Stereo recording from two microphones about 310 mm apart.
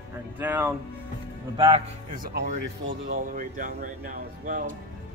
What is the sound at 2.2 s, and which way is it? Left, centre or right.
Speech, right.